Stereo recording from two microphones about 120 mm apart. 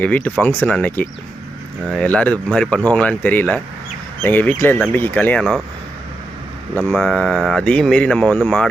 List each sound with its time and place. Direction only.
0.0 s speech: 10° left (ahead or behind)
6.9 s speech: 5° left (ahead or behind)